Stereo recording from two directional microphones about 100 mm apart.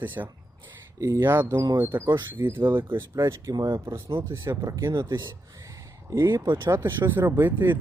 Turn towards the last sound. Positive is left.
turn(degrees=-20)  # may be behind; listen again after turning